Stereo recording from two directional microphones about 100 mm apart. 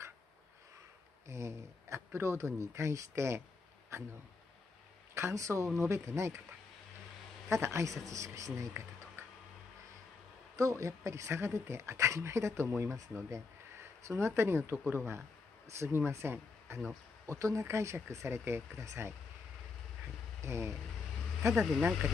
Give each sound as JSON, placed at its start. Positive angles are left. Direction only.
{"t": 1.2, "sound": "speech", "side_deg": -30}
{"t": 5.1, "sound": "speech", "side_deg": -30}
{"t": 7.4, "sound": "speech", "side_deg": -30}
{"t": 10.5, "sound": "speech", "side_deg": -30}
{"t": 14.0, "sound": "speech", "side_deg": -25}
{"t": 20.4, "sound": "speech", "side_deg": -30}
{"t": 21.5, "sound": "speech", "side_deg": -5}